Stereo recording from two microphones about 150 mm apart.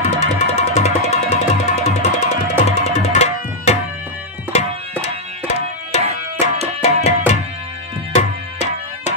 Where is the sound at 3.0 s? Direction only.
45° left (ahead or behind).